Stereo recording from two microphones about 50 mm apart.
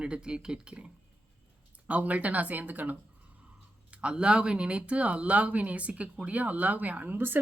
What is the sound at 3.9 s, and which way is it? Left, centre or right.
Speech, right.